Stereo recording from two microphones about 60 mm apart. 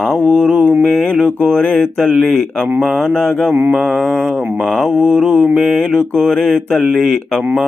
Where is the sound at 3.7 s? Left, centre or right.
Centre.